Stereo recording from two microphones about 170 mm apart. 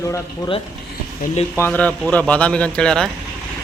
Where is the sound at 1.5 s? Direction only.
10° left (ahead or behind).